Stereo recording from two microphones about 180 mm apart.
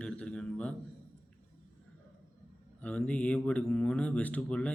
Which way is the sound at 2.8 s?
5° left (ahead or behind).